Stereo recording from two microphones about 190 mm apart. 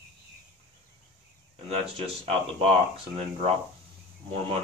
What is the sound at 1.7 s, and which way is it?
Speech, 30° right (ahead or behind).